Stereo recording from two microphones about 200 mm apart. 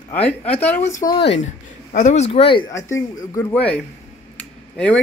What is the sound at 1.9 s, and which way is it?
A man's voice, 35° left (ahead or behind).